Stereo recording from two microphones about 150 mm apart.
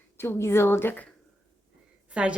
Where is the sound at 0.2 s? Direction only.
15° left (ahead or behind).